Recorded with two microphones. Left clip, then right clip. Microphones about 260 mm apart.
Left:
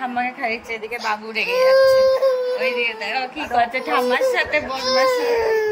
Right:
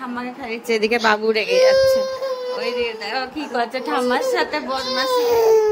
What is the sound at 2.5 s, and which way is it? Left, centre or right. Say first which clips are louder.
A woman's voice: left 2 dB; centre.